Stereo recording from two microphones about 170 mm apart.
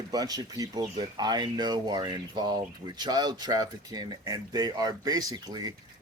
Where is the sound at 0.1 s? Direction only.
20° right (ahead or behind).